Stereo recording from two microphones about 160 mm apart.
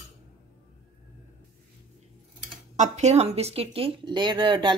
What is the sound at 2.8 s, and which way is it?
Speech, 45° right (ahead or behind).